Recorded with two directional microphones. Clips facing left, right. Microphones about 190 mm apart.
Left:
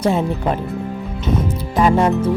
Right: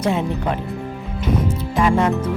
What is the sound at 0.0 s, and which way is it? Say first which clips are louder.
Speech: left 3 dB; 35° left (ahead or behind).